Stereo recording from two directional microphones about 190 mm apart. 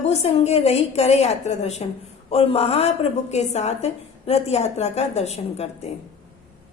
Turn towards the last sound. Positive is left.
turn(degrees=35)  # may be behind; listen again after turning